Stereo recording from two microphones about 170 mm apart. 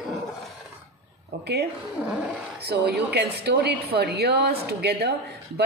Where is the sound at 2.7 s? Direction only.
75° right (ahead or behind).